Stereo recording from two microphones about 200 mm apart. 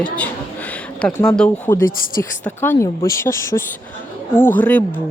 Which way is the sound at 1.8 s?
45° left (ahead or behind).